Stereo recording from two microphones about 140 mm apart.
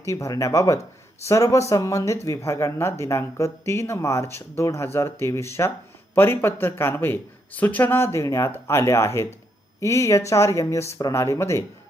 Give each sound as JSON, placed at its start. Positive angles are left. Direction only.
{"t": 0.0, "sound": "speech", "side_deg": 20}